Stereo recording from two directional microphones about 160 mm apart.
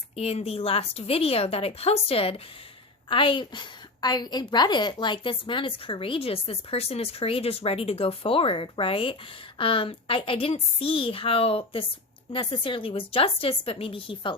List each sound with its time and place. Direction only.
0.2 s a woman's voice: 40° left (ahead or behind)